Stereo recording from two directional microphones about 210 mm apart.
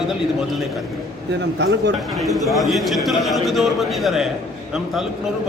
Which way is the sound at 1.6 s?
55° right (ahead or behind).